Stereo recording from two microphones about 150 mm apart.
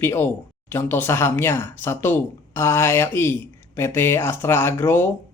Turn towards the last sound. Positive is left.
turn(degrees=15)  # may be behind; listen again after turning